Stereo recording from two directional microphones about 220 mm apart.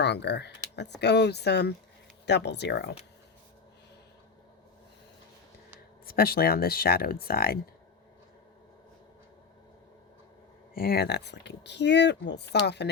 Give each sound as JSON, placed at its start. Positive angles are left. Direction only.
{"t": 0.0, "sound": "speech", "side_deg": 50}
{"t": 6.1, "sound": "speech", "side_deg": 45}
{"t": 10.8, "sound": "speech", "side_deg": 45}